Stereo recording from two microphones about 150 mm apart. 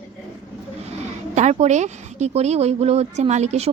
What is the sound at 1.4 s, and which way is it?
Speech, 50° right (ahead or behind).